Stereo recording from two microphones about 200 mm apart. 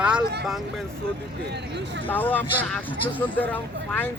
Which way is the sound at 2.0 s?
10° left (ahead or behind).